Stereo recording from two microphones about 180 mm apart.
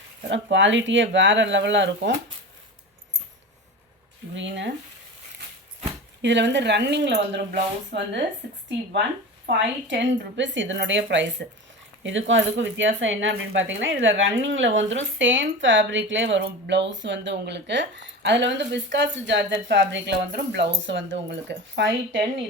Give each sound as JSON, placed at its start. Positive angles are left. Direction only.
{"t": 0.3, "sound": "speech", "side_deg": -90}
{"t": 4.4, "sound": "speech", "side_deg": -85}
{"t": 6.2, "sound": "speech", "side_deg": -80}
{"t": 9.5, "sound": "speech", "side_deg": -80}
{"t": 20.8, "sound": "speech", "side_deg": -90}